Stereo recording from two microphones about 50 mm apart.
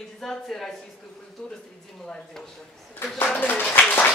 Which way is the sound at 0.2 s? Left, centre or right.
Centre.